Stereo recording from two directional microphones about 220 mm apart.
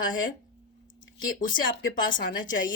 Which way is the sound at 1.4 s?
40° left (ahead or behind).